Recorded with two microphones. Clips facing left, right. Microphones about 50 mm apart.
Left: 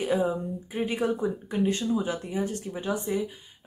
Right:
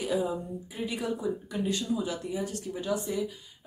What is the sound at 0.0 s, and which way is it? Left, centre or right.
Speech, left.